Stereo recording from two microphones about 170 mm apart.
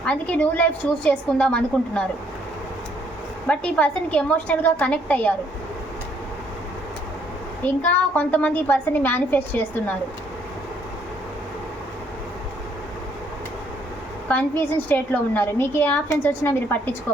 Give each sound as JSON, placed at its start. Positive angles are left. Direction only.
{"t": 0.0, "sound": "a woman's voice", "side_deg": 5}
{"t": 3.4, "sound": "a woman's voice", "side_deg": 5}
{"t": 7.6, "sound": "a woman's voice", "side_deg": 10}
{"t": 14.6, "sound": "a woman's voice", "side_deg": 10}